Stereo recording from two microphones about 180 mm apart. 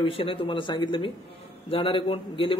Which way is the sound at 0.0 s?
30° left (ahead or behind).